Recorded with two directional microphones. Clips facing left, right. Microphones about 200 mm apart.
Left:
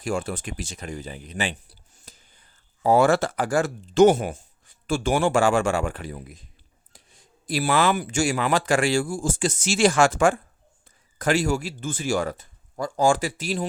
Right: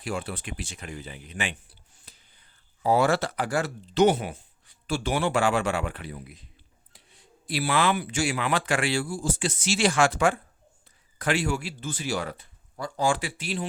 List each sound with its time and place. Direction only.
0.0 s speech: 45° left (ahead or behind)